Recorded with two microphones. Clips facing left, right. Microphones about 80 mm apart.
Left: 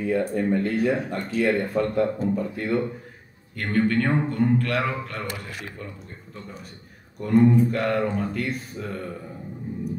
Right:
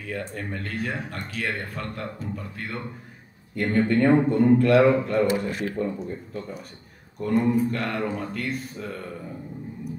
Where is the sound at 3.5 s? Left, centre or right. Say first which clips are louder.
Right 1 dB; right.